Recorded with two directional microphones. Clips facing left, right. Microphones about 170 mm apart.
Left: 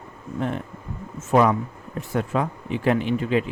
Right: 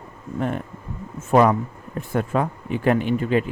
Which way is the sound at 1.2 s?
45° right (ahead or behind).